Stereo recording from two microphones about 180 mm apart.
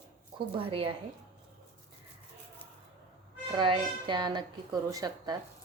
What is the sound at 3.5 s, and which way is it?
A woman's voice, 25° right (ahead or behind).